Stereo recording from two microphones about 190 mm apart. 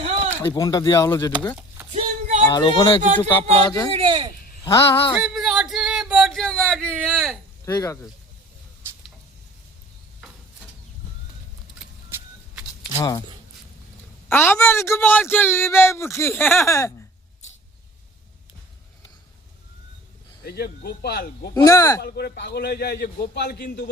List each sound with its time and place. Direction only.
0.5 s speech: 20° left (ahead or behind)
2.0 s a sound: 35° right (ahead or behind)
2.5 s speech: 20° left (ahead or behind)
3.9 s speech: 25° right (ahead or behind)
4.9 s speech: 30° left (ahead or behind)
5.2 s a sound: centre (ahead or behind)
7.6 s speech: 20° left (ahead or behind)
13.0 s speech: 20° left (ahead or behind)
14.3 s speech: 10° left (ahead or behind)
20.4 s a man's voice: 55° left (ahead or behind)
21.5 s speech: 20° left (ahead or behind)
22.0 s a man's voice: 60° left (ahead or behind)